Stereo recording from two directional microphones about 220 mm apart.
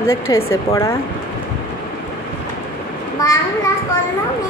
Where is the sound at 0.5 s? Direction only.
15° left (ahead or behind).